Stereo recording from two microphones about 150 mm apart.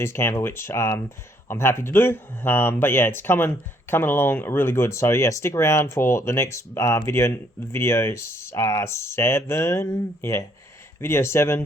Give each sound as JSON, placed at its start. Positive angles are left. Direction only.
{"t": 0.0, "sound": "speech", "side_deg": 15}